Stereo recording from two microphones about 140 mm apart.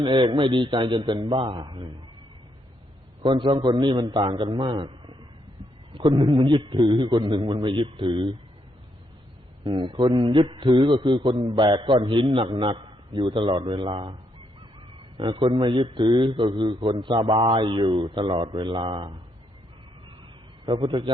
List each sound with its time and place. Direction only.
0.0 s a man's voice: 35° right (ahead or behind)
3.2 s a man's voice: 35° right (ahead or behind)
9.6 s a man's voice: 35° right (ahead or behind)
15.2 s a man's voice: 35° right (ahead or behind)
20.7 s a man's voice: 35° right (ahead or behind)